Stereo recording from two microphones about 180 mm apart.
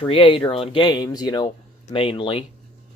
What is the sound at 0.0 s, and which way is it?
Speech, 30° left (ahead or behind).